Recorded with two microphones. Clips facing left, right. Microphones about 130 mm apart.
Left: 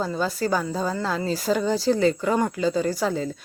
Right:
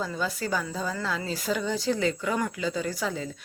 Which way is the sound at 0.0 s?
40° left (ahead or behind).